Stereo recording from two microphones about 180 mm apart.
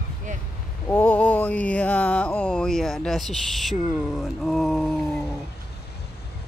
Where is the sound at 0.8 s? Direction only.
10° left (ahead or behind).